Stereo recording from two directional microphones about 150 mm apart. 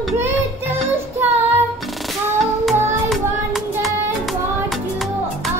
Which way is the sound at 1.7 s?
Centre (ahead or behind).